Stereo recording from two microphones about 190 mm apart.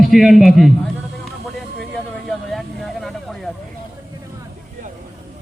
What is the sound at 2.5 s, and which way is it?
Vehicle, centre (ahead or behind).